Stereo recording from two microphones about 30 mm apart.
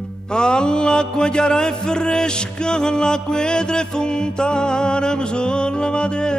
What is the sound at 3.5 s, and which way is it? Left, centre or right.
Music, left.